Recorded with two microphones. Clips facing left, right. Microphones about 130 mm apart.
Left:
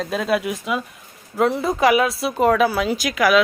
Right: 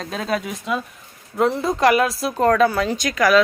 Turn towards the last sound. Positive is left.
turn(degrees=5)  # may be behind; listen again after turning